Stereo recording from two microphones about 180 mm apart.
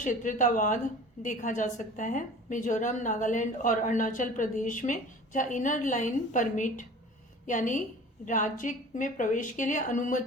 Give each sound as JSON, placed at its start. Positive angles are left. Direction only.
{"t": 0.0, "sound": "a woman's voice", "side_deg": 45}